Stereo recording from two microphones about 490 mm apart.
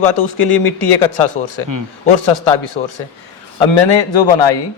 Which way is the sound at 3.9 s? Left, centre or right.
Left.